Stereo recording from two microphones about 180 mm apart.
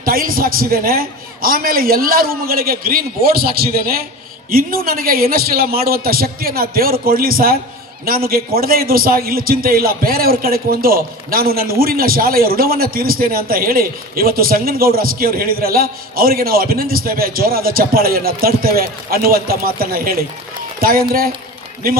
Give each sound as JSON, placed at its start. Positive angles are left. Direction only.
{"t": 0.0, "sound": "a man's voice", "side_deg": -55}